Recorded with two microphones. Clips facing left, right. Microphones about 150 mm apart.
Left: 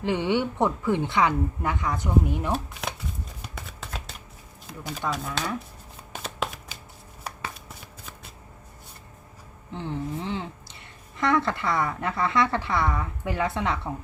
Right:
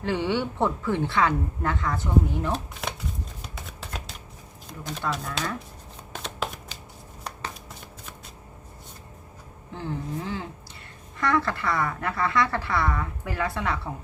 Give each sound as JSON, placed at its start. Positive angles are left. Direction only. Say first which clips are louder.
{"t": 0.0, "sound": "speech", "louder": "left 1 dB", "side_deg": 20}
{"t": 3.5, "sound": "shuffling cards", "louder": "left 1 dB", "side_deg": 0}
{"t": 4.6, "sound": "speech", "louder": "even", "side_deg": 5}
{"t": 6.1, "sound": "shuffling cards", "louder": "even", "side_deg": 5}
{"t": 9.7, "sound": "speech", "louder": "left 1 dB", "side_deg": 20}